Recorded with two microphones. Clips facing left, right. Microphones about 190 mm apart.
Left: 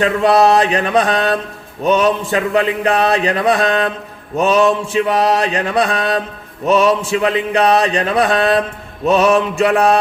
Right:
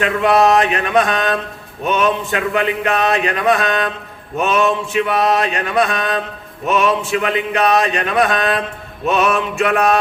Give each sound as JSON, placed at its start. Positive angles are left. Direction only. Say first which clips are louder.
{"t": 0.0, "sound": "speech", "louder": "left 2 dB", "side_deg": 35}